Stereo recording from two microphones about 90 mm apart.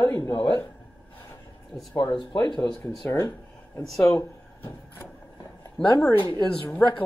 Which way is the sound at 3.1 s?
25° left (ahead or behind).